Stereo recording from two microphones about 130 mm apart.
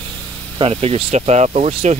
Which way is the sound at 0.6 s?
50° right (ahead or behind).